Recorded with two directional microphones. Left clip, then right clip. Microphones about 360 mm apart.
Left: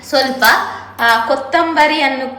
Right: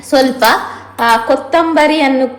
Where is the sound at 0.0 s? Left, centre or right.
Centre.